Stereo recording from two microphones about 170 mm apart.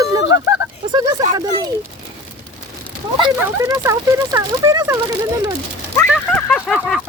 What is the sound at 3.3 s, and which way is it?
Speech, 15° right (ahead or behind).